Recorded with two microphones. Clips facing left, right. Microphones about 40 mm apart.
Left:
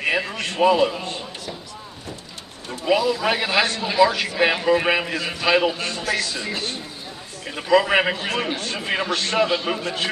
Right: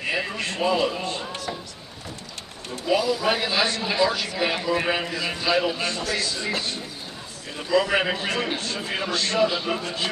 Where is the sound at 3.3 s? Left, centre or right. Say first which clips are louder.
Left 2 dB; left.